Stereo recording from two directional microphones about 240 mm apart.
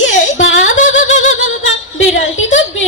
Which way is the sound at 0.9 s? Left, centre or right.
Left.